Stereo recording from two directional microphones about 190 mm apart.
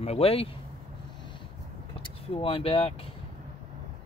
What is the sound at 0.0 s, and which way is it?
Speech, 35° left (ahead or behind).